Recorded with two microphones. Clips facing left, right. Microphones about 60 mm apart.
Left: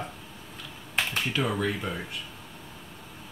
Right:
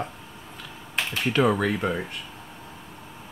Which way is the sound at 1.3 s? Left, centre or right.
Right.